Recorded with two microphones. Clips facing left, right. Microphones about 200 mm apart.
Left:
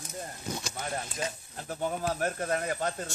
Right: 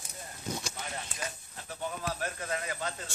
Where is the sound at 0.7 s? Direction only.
45° left (ahead or behind).